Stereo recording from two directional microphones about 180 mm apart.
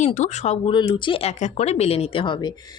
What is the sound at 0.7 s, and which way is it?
Speech, 25° left (ahead or behind).